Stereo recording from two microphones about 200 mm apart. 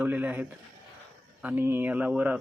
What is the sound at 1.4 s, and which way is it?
Speech, 10° right (ahead or behind).